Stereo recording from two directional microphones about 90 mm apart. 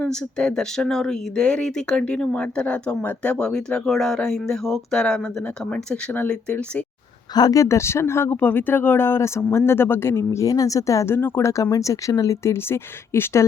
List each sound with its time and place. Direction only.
0.0 s speech: 10° left (ahead or behind)
7.3 s speech: 40° left (ahead or behind)
10.4 s speech: 40° left (ahead or behind)